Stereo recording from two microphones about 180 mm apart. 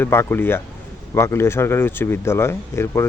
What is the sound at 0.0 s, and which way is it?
A man's voice, 15° left (ahead or behind).